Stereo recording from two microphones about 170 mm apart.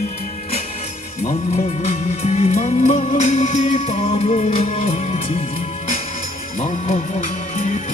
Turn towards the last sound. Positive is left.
turn(degrees=45)  # may be behind; listen again after turning